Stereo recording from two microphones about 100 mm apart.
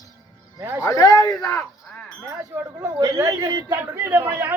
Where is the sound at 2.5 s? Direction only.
20° right (ahead or behind).